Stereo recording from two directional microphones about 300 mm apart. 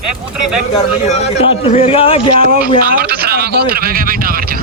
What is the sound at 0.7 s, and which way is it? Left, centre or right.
A man's voice, left.